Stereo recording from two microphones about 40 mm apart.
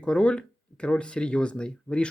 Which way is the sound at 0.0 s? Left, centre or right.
Left.